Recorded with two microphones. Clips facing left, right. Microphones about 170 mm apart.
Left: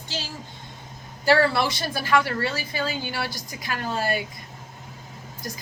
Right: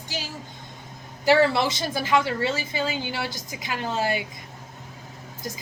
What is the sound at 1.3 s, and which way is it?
Speech, 15° right (ahead or behind).